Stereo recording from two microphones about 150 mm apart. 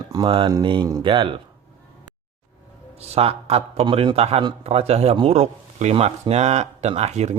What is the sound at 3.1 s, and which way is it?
A man's voice, 45° right (ahead or behind).